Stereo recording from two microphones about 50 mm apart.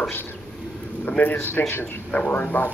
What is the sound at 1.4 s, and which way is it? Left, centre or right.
Speech, left.